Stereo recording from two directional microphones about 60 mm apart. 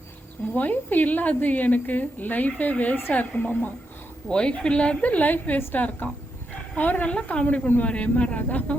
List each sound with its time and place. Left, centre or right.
0.5 s a woman's voice: left